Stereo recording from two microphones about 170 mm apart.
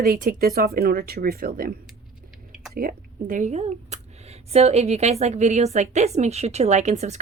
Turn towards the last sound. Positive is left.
turn(degrees=-40)  # may be behind; listen again after turning